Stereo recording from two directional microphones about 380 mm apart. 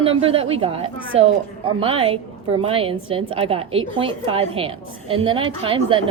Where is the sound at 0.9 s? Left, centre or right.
Right.